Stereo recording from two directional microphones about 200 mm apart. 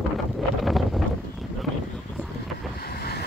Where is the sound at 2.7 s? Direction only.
50° left (ahead or behind).